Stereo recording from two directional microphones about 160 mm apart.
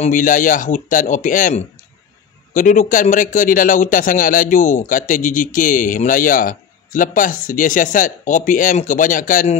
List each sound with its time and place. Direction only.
0.0 s a man's voice: 55° left (ahead or behind)